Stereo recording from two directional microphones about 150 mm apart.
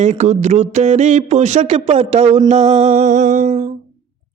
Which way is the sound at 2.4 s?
50° right (ahead or behind).